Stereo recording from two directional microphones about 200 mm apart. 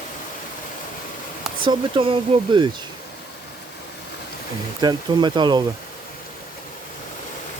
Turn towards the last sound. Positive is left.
turn(degrees=-20)  # may be behind; listen again after turning